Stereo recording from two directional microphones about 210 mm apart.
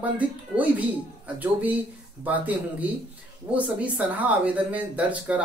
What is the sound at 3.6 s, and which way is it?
Speech, 5° right (ahead or behind).